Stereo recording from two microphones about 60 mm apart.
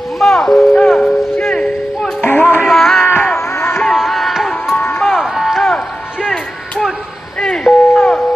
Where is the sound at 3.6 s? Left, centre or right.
Left.